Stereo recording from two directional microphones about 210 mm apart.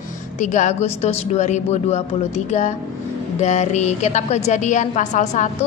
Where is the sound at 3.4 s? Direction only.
35° left (ahead or behind).